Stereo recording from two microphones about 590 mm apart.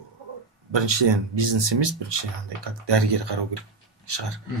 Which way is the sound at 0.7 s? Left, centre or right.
Right.